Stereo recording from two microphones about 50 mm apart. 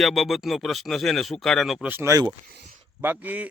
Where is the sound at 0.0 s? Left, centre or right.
Centre.